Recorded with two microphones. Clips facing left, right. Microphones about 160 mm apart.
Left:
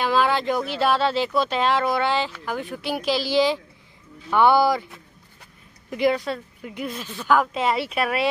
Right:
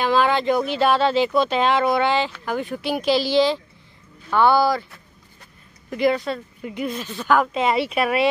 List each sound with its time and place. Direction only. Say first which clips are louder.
0.0 s speech: right 2 dB; 5° left (ahead or behind)
5.9 s speech: right 1 dB; 10° left (ahead or behind)